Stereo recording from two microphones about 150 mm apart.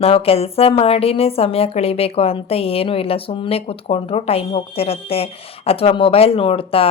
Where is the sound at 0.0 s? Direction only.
40° left (ahead or behind).